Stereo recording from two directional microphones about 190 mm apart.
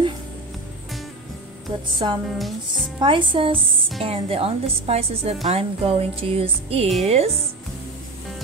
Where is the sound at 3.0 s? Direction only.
25° right (ahead or behind).